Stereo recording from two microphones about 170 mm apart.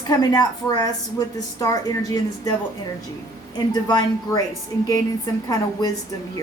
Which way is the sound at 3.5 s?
25° left (ahead or behind).